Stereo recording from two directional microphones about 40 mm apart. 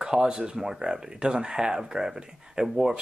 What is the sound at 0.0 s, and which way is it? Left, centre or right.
Speech, centre.